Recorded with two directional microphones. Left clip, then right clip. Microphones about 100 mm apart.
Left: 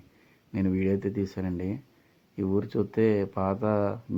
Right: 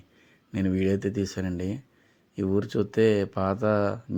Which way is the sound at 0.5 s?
30° right (ahead or behind).